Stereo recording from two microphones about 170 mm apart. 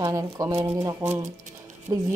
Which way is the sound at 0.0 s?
20° right (ahead or behind).